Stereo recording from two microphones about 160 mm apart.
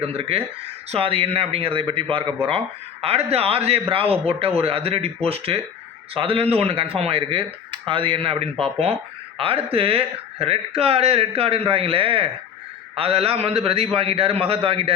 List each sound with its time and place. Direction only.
0.1 s speech: 35° right (ahead or behind)